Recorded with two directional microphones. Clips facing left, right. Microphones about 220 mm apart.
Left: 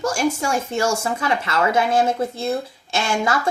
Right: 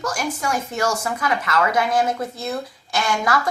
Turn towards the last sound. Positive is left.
turn(degrees=25)  # may be behind; listen again after turning